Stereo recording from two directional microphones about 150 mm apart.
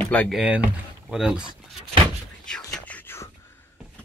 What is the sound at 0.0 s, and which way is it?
Speech, 10° left (ahead or behind).